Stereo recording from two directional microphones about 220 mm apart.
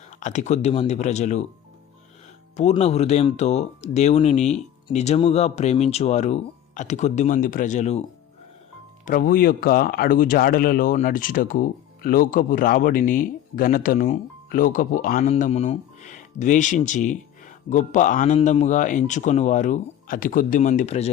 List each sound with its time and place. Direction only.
0.2 s speech: 35° left (ahead or behind)
2.6 s speech: 30° left (ahead or behind)
9.0 s speech: 40° left (ahead or behind)